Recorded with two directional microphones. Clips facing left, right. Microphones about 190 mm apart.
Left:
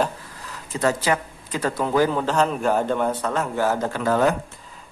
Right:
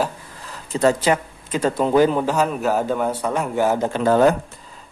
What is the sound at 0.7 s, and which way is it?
Speech, 25° right (ahead or behind).